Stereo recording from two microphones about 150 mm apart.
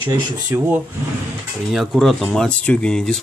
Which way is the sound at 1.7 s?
5° right (ahead or behind).